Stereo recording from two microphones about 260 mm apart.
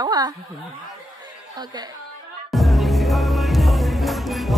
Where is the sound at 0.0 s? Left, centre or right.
Centre.